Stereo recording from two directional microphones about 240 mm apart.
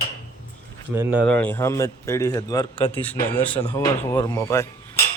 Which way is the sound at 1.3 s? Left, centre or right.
Centre.